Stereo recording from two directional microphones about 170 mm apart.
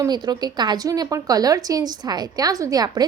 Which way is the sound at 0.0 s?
25° right (ahead or behind).